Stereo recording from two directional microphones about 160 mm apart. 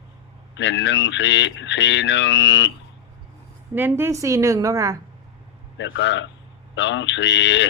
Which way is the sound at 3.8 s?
15° right (ahead or behind).